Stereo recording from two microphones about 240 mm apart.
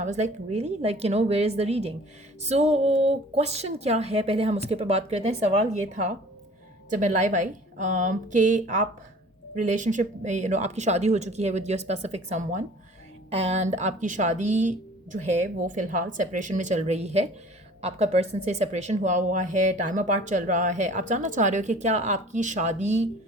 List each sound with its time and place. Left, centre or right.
0.0 s a woman's voice: right